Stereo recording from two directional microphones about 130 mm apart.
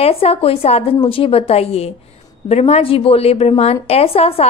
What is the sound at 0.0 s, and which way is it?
Speech, 50° left (ahead or behind).